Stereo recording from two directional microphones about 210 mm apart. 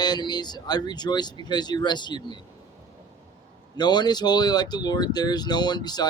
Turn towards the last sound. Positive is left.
turn(degrees=20)  # may be behind; listen again after turning